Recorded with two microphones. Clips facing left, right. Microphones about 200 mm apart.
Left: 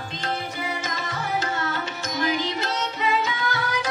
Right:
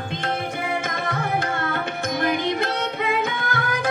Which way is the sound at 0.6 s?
55° right (ahead or behind).